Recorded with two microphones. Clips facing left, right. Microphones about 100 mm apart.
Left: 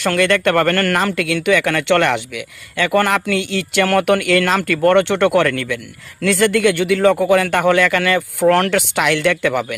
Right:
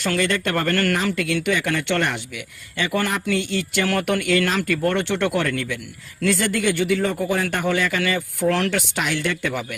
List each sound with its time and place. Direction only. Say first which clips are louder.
0.0 s speech: left 7 dB; 70° left (ahead or behind); by 5.8 s 90° left
6.2 s speech: left 6 dB; 80° left